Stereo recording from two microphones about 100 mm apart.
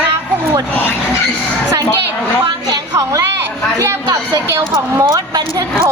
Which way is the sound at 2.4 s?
40° right (ahead or behind).